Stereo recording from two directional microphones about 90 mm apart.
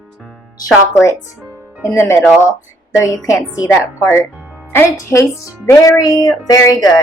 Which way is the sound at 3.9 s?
30° left (ahead or behind).